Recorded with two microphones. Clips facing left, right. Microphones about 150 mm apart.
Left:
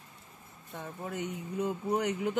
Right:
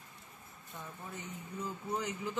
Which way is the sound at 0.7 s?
70° left (ahead or behind).